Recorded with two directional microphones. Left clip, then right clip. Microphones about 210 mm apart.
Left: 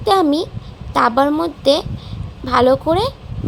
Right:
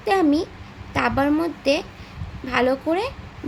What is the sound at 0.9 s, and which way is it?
A woman's voice, 20° left (ahead or behind).